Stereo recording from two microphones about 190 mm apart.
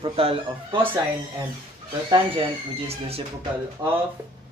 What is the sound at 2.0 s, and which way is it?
Speech, 25° right (ahead or behind).